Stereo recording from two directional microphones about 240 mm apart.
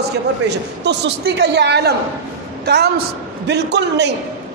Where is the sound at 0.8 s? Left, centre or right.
Right.